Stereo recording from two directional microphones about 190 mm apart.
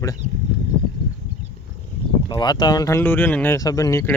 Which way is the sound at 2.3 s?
25° left (ahead or behind).